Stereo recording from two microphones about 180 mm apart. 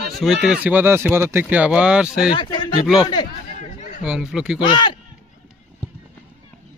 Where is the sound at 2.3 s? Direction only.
30° left (ahead or behind).